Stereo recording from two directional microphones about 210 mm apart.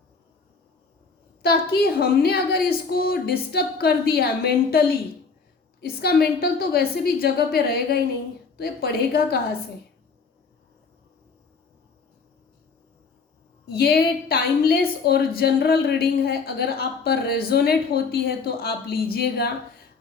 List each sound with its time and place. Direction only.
1.4 s a woman's voice: 45° left (ahead or behind)
13.7 s a woman's voice: 45° left (ahead or behind)